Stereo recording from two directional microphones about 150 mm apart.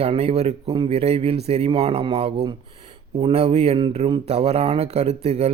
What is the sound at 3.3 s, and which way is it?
Speech, 45° right (ahead or behind).